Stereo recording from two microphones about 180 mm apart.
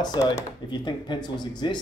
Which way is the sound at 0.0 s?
25° left (ahead or behind).